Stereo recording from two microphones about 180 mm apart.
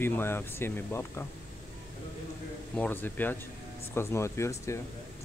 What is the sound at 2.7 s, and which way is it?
Speech, 10° left (ahead or behind).